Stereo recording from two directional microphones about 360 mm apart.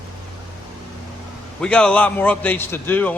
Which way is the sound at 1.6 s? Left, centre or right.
Centre.